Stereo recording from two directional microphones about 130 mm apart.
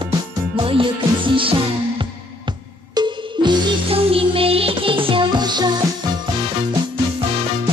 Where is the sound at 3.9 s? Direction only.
45° right (ahead or behind).